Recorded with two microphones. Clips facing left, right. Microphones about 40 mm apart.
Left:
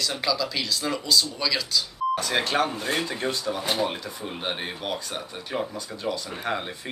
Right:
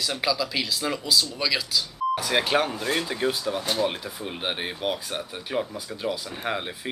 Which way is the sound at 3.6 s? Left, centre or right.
Centre.